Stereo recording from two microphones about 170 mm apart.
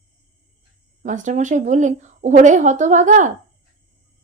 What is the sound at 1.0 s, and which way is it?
Speech, 45° right (ahead or behind).